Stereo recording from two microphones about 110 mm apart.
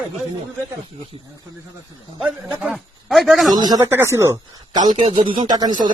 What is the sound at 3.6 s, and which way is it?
Speech, 35° right (ahead or behind).